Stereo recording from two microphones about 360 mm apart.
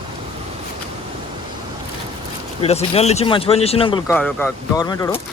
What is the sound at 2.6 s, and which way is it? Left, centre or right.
Speech, centre.